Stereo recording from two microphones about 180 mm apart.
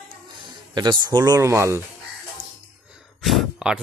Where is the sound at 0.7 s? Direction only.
25° right (ahead or behind).